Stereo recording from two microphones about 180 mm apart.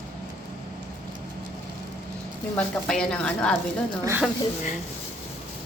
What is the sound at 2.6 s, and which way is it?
Speech, 5° left (ahead or behind).